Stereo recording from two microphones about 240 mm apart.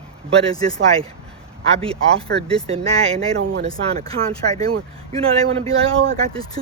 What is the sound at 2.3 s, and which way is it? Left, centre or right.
Speech, right.